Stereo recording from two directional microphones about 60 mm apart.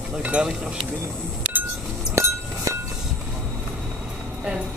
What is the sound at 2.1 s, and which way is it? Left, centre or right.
Chink, right.